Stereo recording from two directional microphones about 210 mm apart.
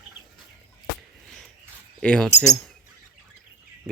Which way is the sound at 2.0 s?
5° left (ahead or behind).